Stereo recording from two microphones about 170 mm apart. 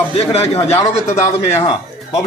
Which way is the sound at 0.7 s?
15° left (ahead or behind).